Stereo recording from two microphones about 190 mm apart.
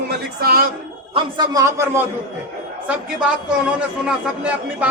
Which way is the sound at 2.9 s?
5° right (ahead or behind).